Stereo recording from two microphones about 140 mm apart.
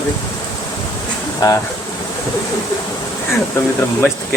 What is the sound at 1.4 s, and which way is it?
Speech, 25° left (ahead or behind).